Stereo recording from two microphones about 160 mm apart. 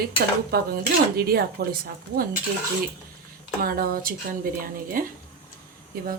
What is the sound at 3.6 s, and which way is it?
A woman's voice, 65° right (ahead or behind).